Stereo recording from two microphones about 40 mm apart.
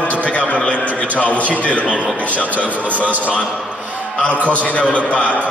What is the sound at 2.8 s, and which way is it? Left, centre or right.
Speech, right.